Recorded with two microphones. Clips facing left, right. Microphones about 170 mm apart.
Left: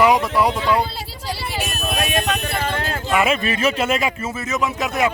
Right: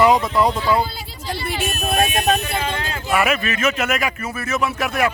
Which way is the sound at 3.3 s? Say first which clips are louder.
Left 1 dB; 35° left (ahead or behind).